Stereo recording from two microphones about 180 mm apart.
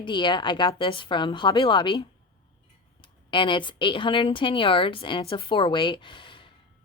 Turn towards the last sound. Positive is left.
turn(degrees=30)  # may be behind; listen again after turning